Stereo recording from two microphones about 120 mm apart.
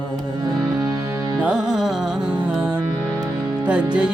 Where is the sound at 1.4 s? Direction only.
5° right (ahead or behind).